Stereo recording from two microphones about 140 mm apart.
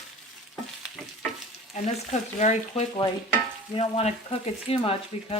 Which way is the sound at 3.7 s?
45° left (ahead or behind).